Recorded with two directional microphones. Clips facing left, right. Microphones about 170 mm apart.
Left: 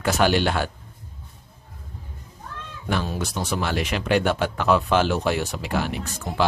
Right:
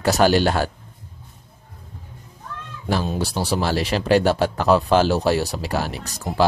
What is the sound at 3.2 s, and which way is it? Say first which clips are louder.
Speech: right 4 dB; 35° right (ahead or behind).